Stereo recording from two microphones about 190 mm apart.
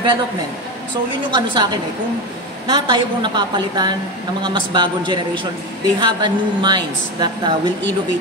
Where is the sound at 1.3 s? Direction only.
20° right (ahead or behind).